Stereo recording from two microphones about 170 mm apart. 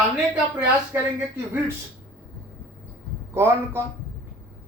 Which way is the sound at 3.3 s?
15° right (ahead or behind).